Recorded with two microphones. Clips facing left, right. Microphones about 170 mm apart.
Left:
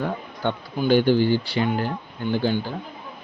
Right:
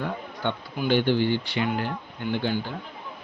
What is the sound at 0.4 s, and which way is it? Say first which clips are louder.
Speech: left 4 dB; 40° left (ahead or behind).